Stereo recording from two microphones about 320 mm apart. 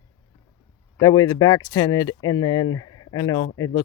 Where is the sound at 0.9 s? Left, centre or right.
Centre.